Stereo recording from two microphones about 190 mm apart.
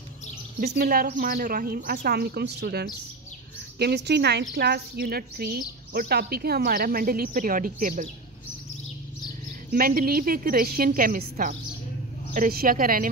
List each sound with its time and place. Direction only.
0.7 s a woman's voice: 55° right (ahead or behind)
9.7 s speech: 50° right (ahead or behind)